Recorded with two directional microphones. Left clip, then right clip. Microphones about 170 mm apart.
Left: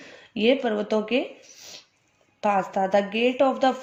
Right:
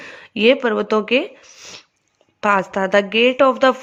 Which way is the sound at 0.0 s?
40° right (ahead or behind).